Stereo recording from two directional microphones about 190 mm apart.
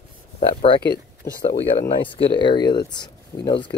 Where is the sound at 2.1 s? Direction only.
25° left (ahead or behind).